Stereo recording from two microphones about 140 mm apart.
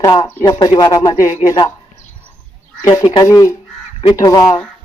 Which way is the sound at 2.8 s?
30° left (ahead or behind).